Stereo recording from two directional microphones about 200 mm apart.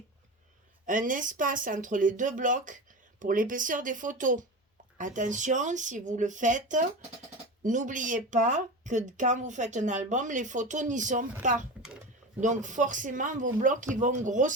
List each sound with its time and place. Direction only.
0.9 s speech: 40° right (ahead or behind)